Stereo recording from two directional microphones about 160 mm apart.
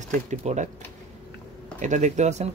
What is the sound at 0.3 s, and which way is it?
Speech, 45° right (ahead or behind).